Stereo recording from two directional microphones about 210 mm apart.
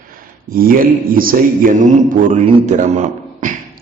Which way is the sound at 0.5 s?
45° right (ahead or behind).